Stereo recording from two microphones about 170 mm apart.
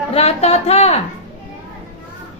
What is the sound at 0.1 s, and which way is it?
Child singing, 35° left (ahead or behind).